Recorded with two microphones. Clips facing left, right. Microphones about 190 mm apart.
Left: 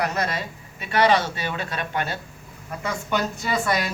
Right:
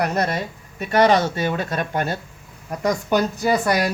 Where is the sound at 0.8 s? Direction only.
45° right (ahead or behind).